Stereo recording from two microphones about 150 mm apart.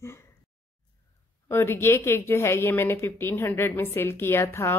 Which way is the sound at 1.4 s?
15° left (ahead or behind).